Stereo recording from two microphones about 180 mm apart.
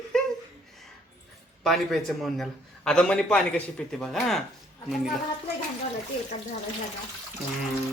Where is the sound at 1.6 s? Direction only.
Centre (ahead or behind).